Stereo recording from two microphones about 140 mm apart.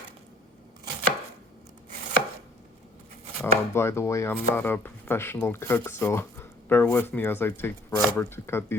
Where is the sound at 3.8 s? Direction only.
20° left (ahead or behind).